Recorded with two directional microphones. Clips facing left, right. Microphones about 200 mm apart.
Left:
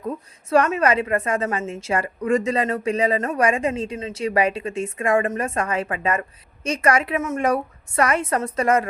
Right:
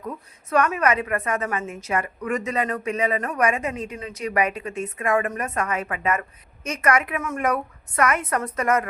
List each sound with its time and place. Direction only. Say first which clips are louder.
0.5 s a woman's voice: left 3 dB; 30° left (ahead or behind)